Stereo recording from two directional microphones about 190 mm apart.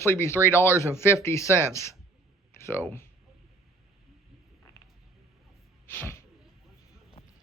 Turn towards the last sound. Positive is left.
turn(degrees=10)  # may be behind; listen again after turning